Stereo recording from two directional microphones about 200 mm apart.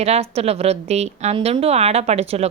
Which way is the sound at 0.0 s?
30° right (ahead or behind).